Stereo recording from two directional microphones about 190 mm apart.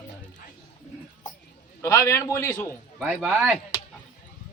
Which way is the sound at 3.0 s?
5° right (ahead or behind).